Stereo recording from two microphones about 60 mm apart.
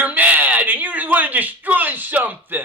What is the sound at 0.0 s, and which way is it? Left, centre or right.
Speech, right.